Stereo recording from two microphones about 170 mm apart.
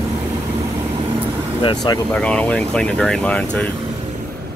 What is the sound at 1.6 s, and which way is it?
Speech, 25° left (ahead or behind).